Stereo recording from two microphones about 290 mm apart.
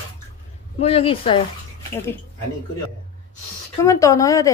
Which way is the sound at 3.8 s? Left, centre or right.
Centre.